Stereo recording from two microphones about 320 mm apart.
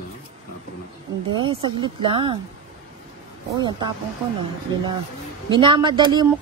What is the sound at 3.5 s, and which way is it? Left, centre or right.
Speech, centre.